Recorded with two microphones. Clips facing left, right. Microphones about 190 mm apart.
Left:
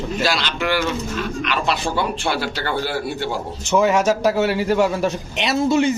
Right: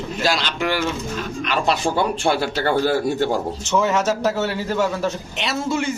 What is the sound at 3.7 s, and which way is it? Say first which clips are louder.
A man's voice: left 3 dB; 15° left (ahead or behind).